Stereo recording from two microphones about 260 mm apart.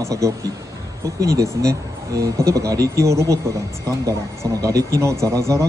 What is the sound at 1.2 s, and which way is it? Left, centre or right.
Speech, right.